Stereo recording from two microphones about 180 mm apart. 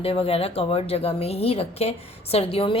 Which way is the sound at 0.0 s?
30° left (ahead or behind).